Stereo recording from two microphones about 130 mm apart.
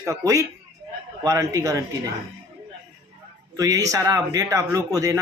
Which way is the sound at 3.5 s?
25° right (ahead or behind).